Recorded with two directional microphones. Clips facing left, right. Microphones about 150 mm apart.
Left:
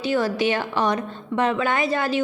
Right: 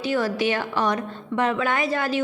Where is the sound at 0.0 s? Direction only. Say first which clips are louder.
Left 1 dB; 25° left (ahead or behind).